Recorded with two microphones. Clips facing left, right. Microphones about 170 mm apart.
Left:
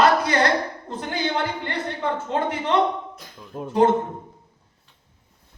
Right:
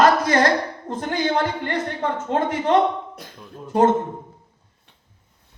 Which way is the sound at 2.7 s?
60° right (ahead or behind).